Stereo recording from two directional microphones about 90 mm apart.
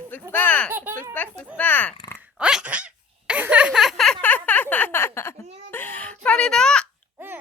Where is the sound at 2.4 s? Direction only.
10° right (ahead or behind).